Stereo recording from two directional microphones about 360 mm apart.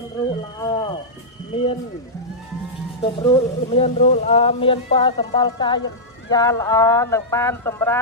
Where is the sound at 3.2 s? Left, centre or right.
Centre.